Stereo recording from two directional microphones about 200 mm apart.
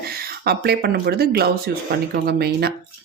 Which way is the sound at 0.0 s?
50° right (ahead or behind).